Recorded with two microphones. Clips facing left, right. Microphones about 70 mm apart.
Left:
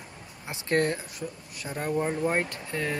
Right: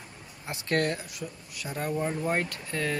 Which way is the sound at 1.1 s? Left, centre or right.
Left.